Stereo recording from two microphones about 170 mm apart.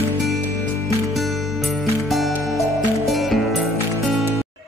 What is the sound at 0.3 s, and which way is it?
Music, 15° right (ahead or behind).